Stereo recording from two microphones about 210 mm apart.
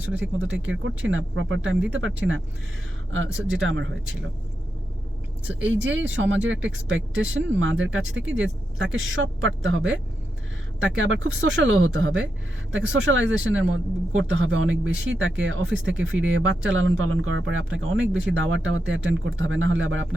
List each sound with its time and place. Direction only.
0.3 s speech: 65° right (ahead or behind)
5.5 s speech: 65° right (ahead or behind)